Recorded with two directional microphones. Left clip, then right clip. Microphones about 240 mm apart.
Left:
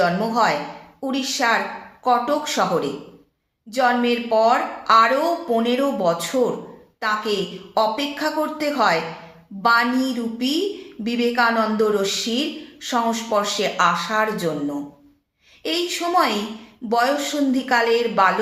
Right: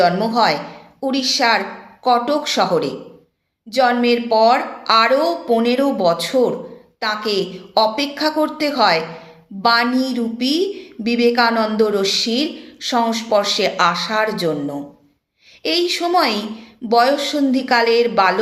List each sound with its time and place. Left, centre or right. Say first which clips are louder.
0.0 s a woman's voice: right 4 dB; right
15.6 s a woman's voice: right 5 dB; right